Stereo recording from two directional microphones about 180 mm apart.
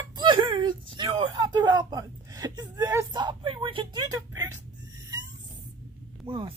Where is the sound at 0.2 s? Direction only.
25° right (ahead or behind).